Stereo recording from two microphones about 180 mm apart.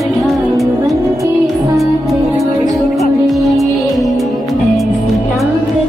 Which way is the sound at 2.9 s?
Centre (ahead or behind).